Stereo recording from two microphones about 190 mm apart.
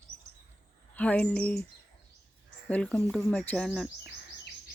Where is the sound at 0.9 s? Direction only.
5° left (ahead or behind).